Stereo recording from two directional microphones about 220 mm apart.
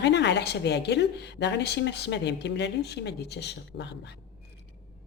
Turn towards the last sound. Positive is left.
turn(degrees=50)  # may be behind; listen again after turning